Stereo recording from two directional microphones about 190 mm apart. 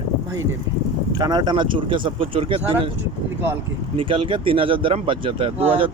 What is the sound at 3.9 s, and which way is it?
Speech, 30° right (ahead or behind).